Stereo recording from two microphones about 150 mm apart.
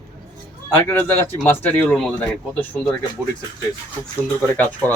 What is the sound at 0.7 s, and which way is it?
Speech, 15° left (ahead or behind).